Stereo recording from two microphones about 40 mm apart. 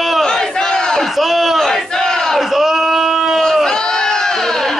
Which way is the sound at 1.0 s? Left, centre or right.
Centre.